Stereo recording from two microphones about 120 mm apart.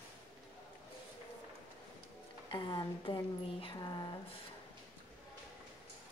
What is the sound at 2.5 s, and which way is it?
Speech, 40° left (ahead or behind).